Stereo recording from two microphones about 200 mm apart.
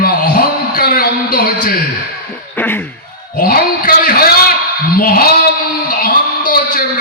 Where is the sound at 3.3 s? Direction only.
50° left (ahead or behind).